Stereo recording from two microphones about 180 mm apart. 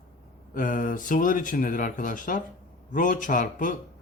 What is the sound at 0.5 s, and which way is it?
A man's voice, 45° left (ahead or behind).